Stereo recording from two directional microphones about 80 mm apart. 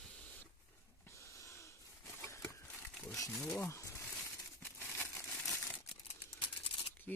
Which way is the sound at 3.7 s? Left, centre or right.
Left.